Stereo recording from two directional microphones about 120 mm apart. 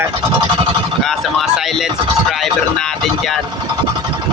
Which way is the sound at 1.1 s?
Centre (ahead or behind).